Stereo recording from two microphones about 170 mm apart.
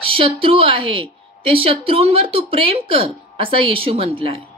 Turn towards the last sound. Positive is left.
turn(degrees=-30)  # may be behind; listen again after turning